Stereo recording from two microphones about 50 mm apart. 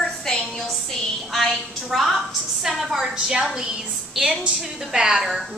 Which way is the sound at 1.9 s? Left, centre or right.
Centre.